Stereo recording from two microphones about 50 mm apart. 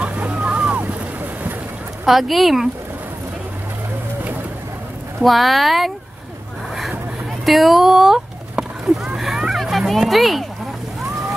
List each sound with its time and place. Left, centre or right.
0.0 s boat: right
2.0 s speech: centre
5.2 s speech: centre
6.7 s vehicle: centre
7.4 s a sound: centre
9.6 s speech: centre